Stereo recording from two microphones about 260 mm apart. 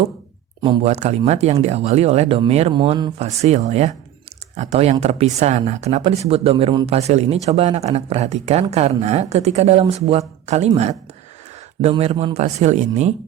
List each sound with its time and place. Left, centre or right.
0.6 s speech: right
11.8 s speech: right